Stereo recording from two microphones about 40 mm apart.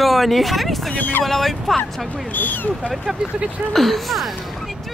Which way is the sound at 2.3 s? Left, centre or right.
Left.